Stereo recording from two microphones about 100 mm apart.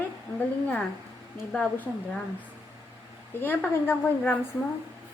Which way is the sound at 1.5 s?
15° left (ahead or behind).